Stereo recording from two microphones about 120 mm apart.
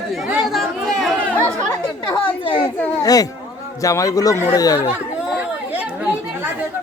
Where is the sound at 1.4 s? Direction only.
35° left (ahead or behind).